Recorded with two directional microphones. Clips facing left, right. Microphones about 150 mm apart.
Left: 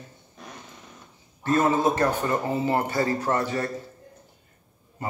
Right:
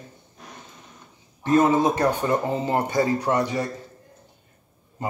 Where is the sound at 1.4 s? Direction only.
15° right (ahead or behind).